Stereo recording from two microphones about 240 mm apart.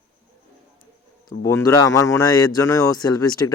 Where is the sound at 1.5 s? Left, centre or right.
Centre.